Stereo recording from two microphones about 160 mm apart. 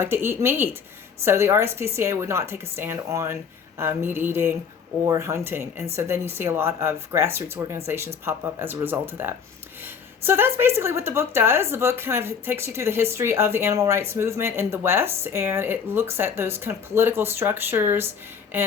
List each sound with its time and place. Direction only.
0.0 s speech: 15° right (ahead or behind)